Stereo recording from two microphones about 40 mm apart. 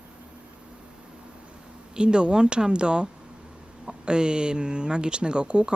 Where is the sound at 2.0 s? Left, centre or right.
Right.